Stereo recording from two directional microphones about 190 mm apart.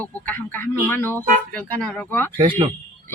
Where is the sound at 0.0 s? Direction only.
10° left (ahead or behind).